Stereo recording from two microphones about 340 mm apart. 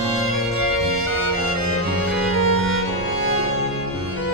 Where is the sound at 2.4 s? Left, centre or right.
Left.